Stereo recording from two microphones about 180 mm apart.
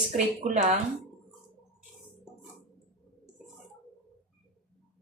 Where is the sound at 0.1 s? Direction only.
40° right (ahead or behind).